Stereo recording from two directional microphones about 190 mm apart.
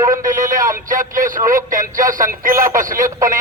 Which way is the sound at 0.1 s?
45° right (ahead or behind).